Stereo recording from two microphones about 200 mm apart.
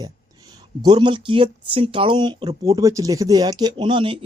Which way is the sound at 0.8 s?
20° right (ahead or behind).